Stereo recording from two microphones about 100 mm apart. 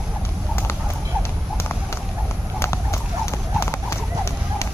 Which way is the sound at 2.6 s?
30° left (ahead or behind).